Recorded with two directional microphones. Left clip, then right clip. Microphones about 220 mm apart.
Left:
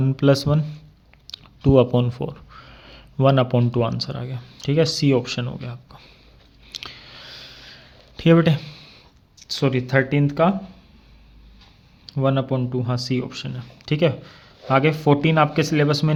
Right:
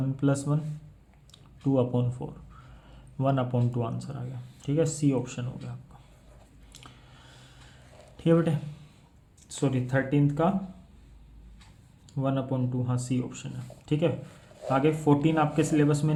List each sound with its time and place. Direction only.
0.2 s speech: 35° left (ahead or behind)
6.7 s a sound: 40° left (ahead or behind)
8.1 s speech: 40° left (ahead or behind)
12.0 s speech: 45° left (ahead or behind)